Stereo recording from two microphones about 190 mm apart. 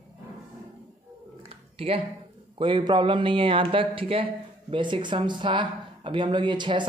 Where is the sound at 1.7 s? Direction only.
30° right (ahead or behind).